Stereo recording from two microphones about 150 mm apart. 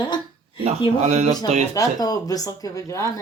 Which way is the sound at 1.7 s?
25° left (ahead or behind).